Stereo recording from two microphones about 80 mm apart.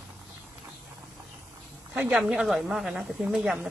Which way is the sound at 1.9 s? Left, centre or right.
Right.